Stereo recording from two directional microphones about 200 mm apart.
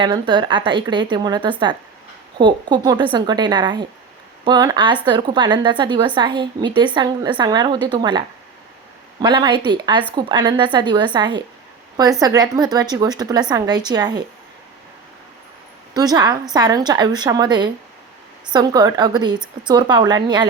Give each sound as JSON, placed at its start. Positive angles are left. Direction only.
{"t": 0.0, "sound": "a woman's voice", "side_deg": -25}
{"t": 9.2, "sound": "a woman's voice", "side_deg": -20}
{"t": 16.0, "sound": "a woman's voice", "side_deg": -20}